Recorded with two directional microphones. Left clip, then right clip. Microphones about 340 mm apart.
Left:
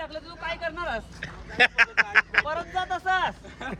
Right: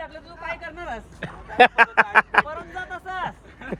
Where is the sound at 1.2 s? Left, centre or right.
Centre.